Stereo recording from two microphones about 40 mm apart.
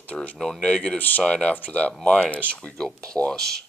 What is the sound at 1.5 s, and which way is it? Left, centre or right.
Speech, left.